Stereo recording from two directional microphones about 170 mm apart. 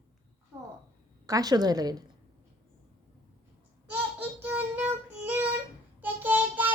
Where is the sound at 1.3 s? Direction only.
20° right (ahead or behind).